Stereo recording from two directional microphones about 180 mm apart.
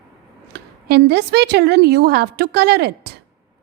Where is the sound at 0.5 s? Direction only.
65° right (ahead or behind).